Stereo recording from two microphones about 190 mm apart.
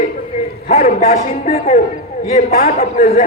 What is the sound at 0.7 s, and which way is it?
A man's voice, 35° left (ahead or behind).